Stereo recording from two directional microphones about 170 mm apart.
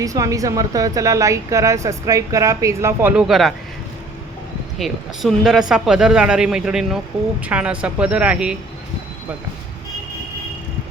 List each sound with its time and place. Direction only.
0.0 s speech: 20° right (ahead or behind); by 3.5 s centre (ahead or behind)
4.8 s speech: centre (ahead or behind)